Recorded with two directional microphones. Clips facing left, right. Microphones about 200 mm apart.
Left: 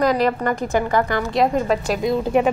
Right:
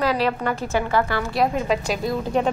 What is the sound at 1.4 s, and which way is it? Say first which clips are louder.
Speech: left 2 dB; centre (ahead or behind).